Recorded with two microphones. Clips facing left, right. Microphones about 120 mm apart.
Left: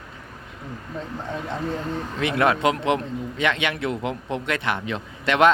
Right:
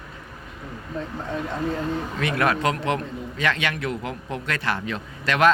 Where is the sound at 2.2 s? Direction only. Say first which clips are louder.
Left 3 dB; 20° left (ahead or behind).